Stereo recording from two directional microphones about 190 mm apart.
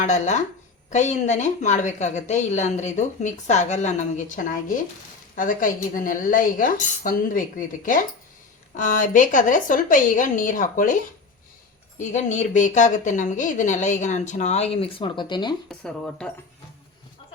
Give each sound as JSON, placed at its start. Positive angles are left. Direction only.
{"t": 0.0, "sound": "a woman's voice", "side_deg": 40}
{"t": 11.9, "sound": "a woman's voice", "side_deg": 40}
{"t": 15.7, "sound": "speech", "side_deg": 5}